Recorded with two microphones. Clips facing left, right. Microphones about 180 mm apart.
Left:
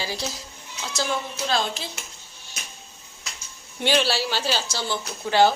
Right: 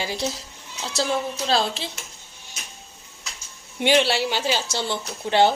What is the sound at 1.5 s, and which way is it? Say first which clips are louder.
Speech: right 2 dB; 30° right (ahead or behind).